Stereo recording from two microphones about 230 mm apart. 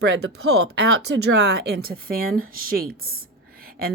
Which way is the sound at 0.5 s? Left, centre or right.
Right.